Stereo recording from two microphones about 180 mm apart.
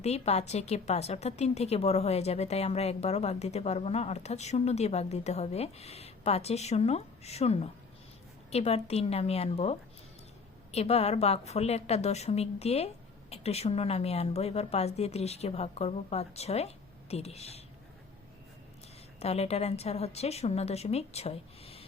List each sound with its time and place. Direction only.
0.0 s a woman's voice: 35° left (ahead or behind)
19.2 s a woman's voice: 35° left (ahead or behind)